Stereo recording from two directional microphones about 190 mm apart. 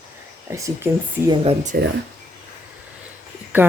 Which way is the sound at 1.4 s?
40° right (ahead or behind).